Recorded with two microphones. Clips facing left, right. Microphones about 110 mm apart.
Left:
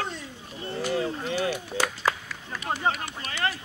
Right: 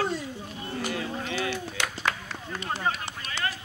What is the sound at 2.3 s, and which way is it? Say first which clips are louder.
Run: right 2 dB; 30° right (ahead or behind).